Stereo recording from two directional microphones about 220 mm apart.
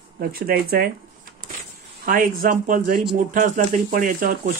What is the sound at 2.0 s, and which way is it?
Speech, 40° right (ahead or behind).